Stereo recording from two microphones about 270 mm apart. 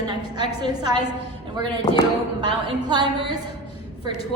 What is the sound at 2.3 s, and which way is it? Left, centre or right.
A woman's voice, centre.